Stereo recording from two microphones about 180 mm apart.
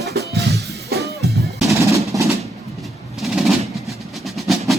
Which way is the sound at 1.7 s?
15° right (ahead or behind).